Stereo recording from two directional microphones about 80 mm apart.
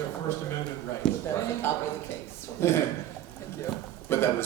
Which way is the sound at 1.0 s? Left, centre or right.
Centre.